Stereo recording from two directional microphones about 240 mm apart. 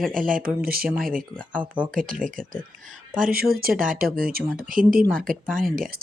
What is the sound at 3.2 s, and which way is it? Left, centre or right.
Speech, right.